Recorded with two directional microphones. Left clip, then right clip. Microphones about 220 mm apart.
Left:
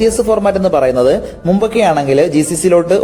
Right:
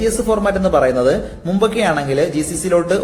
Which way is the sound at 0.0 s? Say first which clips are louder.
Left 5 dB; 30° left (ahead or behind).